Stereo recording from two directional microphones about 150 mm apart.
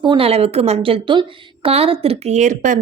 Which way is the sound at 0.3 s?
45° right (ahead or behind).